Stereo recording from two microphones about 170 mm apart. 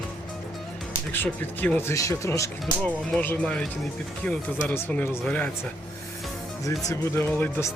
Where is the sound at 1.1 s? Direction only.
10° left (ahead or behind).